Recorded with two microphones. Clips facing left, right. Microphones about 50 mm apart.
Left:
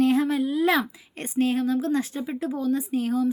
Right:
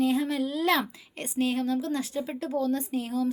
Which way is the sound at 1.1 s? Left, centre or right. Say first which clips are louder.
Left 4 dB; left.